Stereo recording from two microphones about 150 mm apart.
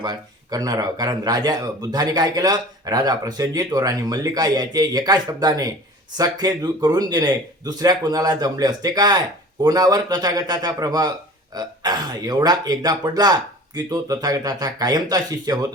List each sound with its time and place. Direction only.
0.0 s speech: 25° right (ahead or behind)